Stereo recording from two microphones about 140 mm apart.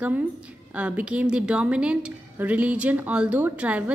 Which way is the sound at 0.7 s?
10° right (ahead or behind).